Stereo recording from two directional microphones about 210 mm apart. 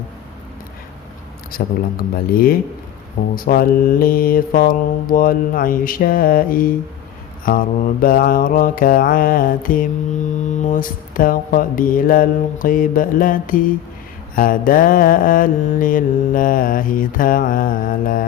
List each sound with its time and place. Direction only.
1.5 s mantra: 45° left (ahead or behind)